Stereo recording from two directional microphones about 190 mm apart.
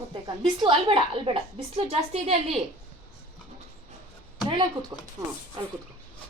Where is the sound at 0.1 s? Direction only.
25° right (ahead or behind).